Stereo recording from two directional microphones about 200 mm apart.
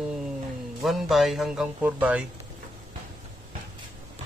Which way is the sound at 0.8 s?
Centre (ahead or behind).